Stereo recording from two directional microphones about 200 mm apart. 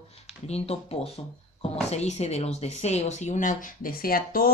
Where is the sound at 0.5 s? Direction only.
30° left (ahead or behind).